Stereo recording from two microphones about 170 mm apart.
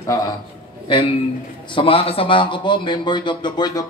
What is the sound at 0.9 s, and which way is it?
A man's voice, 30° left (ahead or behind).